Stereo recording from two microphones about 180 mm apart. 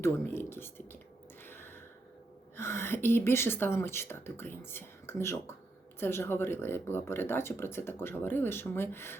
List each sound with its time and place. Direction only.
0.0 s speech: 10° left (ahead or behind)
1.5 s gasp: 10° left (ahead or behind)
2.6 s speech: 15° left (ahead or behind)